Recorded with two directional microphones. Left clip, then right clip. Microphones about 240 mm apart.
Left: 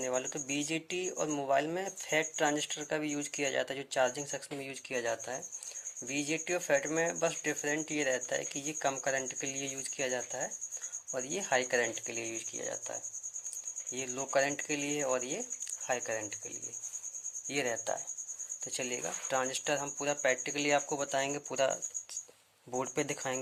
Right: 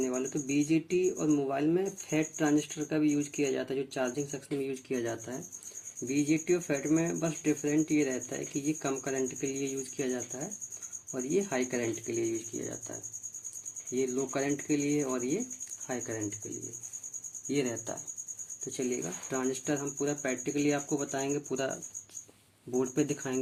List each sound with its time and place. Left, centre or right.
0.0 s speech: left
13.9 s speech: left
17.5 s speech: left